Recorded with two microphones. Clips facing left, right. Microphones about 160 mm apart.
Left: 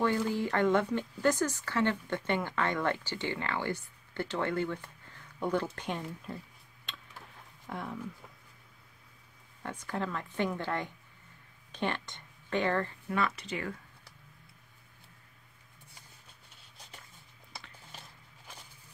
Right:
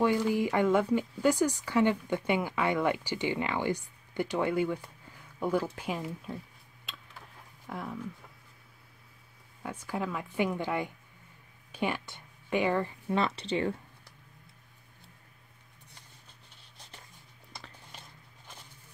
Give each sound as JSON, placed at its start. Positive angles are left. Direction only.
{"t": 0.3, "sound": "speech", "side_deg": -10}
{"t": 6.9, "sound": "a sound", "side_deg": -5}
{"t": 7.6, "sound": "speech", "side_deg": 0}
{"t": 9.6, "sound": "speech", "side_deg": -10}
{"t": 13.1, "sound": "speech", "side_deg": -30}